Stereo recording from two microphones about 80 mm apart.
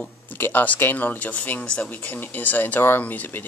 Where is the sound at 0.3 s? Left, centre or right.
Left.